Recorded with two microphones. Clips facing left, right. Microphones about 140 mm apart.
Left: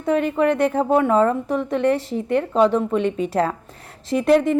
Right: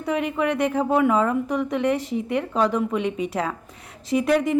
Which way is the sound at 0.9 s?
30° left (ahead or behind).